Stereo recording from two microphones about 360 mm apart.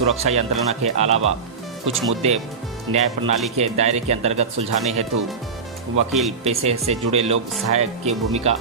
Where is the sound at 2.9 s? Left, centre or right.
Centre.